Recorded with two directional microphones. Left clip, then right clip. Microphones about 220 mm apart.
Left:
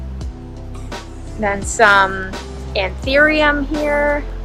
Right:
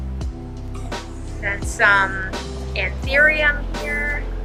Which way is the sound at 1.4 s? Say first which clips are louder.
Left 5 dB; 20° left (ahead or behind).